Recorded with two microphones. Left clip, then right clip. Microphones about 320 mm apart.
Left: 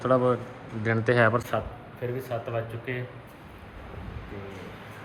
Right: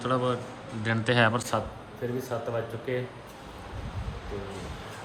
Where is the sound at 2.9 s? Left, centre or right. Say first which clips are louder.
Right 5 dB; centre.